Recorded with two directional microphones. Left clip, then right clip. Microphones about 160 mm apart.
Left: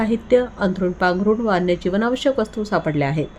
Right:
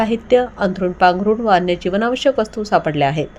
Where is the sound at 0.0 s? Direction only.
20° right (ahead or behind).